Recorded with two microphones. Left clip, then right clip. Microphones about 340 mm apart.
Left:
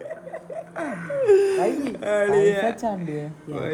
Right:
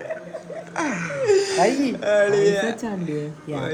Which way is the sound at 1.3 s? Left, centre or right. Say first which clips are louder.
Left 2 dB; left.